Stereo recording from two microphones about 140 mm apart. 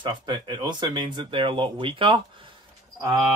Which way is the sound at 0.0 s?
30° right (ahead or behind).